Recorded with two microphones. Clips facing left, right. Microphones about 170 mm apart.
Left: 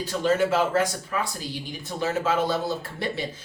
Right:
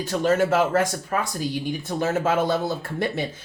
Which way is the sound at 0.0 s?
50° right (ahead or behind).